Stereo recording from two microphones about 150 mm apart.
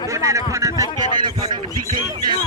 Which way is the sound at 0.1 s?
20° right (ahead or behind).